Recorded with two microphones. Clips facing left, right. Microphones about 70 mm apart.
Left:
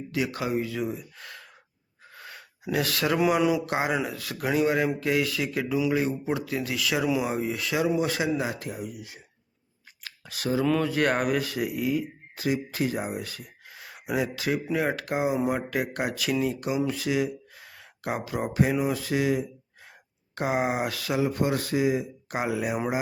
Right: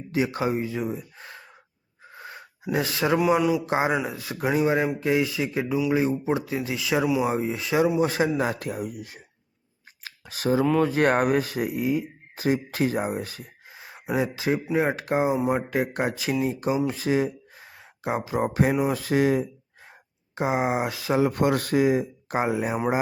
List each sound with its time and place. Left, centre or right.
0.1 s speech: right
2.0 s wheeze: right
2.7 s speech: centre
3.2 s speech: centre
3.7 s speech: right
7.9 s speech: right
8.4 s speech: right
10.0 s a sound: right
10.8 s speech: right
12.5 s speech: right
18.4 s speech: right
20.3 s speech: centre
21.2 s speech: right
22.3 s speech: right